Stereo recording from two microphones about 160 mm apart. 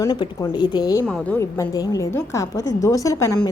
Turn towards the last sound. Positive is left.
turn(degrees=20)  # may be behind; listen again after turning